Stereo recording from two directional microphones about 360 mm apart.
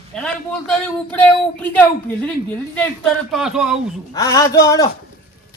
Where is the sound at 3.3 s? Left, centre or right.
Centre.